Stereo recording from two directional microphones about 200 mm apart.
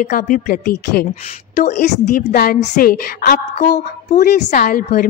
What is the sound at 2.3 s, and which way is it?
A woman's voice, 50° left (ahead or behind).